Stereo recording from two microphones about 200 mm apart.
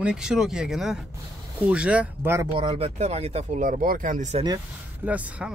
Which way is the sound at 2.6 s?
30° right (ahead or behind).